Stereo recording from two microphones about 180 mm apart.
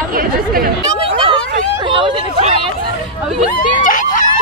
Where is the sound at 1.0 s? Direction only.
30° right (ahead or behind).